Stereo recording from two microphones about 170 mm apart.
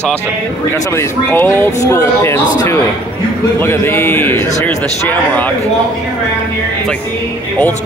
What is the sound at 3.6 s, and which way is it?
Speech, 15° left (ahead or behind).